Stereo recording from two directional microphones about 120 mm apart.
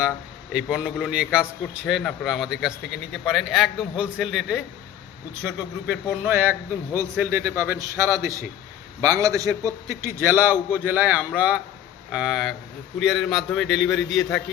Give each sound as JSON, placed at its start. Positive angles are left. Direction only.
{"t": 0.5, "sound": "a man's voice", "side_deg": -10}